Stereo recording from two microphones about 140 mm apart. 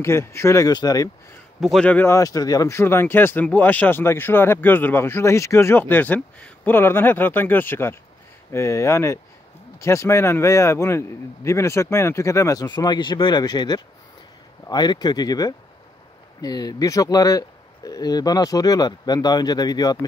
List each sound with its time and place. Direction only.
0.0 s a man's voice: 20° left (ahead or behind)
1.6 s a man's voice: 5° left (ahead or behind); by 20.1 s 25° left (ahead or behind)